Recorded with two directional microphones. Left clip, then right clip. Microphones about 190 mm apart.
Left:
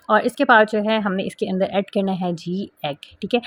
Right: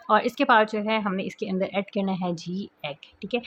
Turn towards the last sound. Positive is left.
turn(degrees=30)  # may be behind; listen again after turning